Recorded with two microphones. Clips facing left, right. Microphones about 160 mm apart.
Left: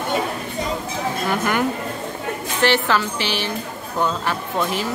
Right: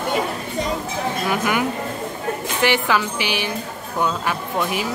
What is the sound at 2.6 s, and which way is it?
Speech, 15° right (ahead or behind).